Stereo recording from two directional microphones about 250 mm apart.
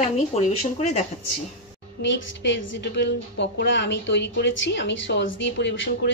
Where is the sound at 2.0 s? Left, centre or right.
Left.